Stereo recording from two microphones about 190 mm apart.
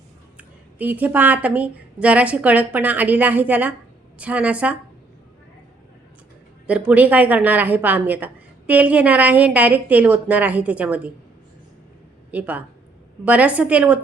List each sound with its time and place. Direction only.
0.3 s a woman's voice: 10° right (ahead or behind)
6.7 s a woman's voice: 5° right (ahead or behind)
12.3 s a woman's voice: 10° right (ahead or behind)